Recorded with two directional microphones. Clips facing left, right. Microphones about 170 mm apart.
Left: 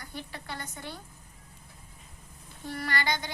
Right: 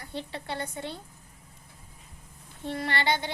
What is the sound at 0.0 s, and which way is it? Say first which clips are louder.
Child singing: right 5 dB; 25° right (ahead or behind).